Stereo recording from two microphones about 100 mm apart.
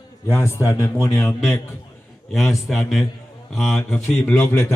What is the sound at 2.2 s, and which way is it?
Speech, centre (ahead or behind).